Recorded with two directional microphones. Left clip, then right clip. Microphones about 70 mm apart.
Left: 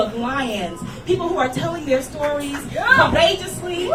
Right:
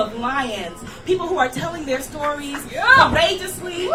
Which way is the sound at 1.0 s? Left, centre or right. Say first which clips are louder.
Even; right.